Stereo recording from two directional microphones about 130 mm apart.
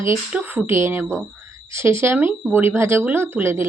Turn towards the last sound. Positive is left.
turn(degrees=-20)  # may be behind; listen again after turning